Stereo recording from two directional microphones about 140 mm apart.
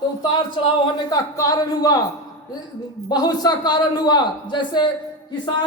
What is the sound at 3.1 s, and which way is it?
A man's voice, 30° left (ahead or behind).